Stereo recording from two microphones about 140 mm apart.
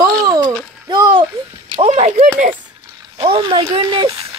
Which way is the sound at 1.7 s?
45° right (ahead or behind).